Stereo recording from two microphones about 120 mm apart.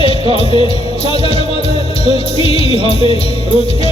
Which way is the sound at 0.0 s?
50° left (ahead or behind).